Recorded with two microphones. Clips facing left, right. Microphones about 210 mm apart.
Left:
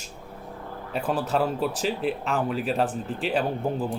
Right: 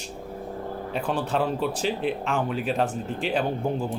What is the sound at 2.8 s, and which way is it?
Speech, 35° left (ahead or behind).